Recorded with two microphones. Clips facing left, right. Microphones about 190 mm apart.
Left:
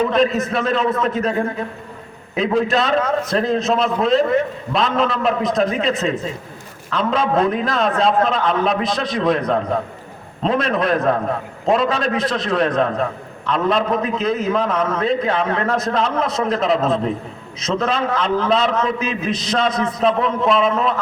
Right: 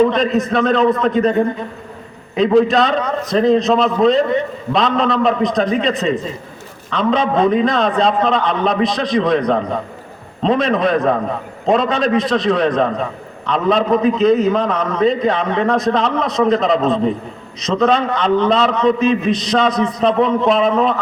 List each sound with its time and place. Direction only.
0.1 s a man's voice: centre (ahead or behind)